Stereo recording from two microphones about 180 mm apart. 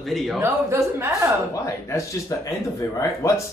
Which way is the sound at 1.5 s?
15° left (ahead or behind).